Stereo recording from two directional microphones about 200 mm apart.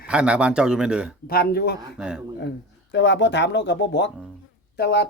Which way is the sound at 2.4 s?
60° left (ahead or behind).